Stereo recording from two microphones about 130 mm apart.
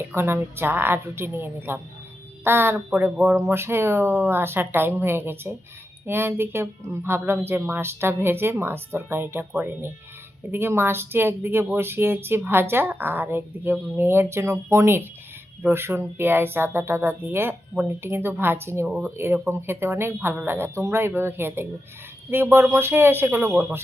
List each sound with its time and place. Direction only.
0.1 s speech: 20° right (ahead or behind)
18.9 s speech: 5° right (ahead or behind)
19.1 s speech: 20° right (ahead or behind)